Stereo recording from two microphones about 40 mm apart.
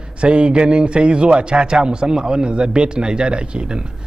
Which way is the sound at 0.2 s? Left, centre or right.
Right.